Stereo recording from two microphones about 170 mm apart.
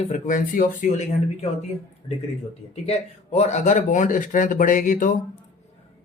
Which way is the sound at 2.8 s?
40° left (ahead or behind).